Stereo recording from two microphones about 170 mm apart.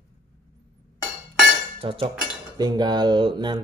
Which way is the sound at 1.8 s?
35° right (ahead or behind).